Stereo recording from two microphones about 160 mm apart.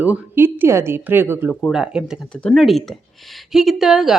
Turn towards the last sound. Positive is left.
turn(degrees=-5)  # may be behind; listen again after turning